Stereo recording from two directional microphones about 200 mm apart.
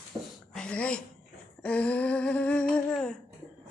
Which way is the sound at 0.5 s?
5° left (ahead or behind).